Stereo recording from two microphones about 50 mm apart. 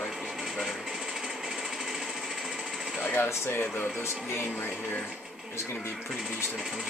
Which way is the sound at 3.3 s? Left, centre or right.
Left.